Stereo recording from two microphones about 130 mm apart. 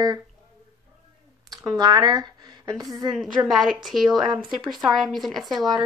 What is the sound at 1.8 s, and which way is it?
A woman's voice, 35° right (ahead or behind).